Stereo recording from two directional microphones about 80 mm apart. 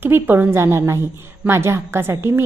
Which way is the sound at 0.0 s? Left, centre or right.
Right.